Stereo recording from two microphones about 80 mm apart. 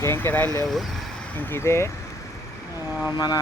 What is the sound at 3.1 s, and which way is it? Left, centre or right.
Vehicle, left.